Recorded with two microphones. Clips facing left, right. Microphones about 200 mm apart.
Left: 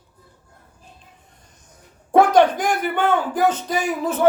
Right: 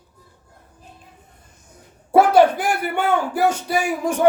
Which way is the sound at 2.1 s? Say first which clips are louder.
Right 1 dB; 10° right (ahead or behind).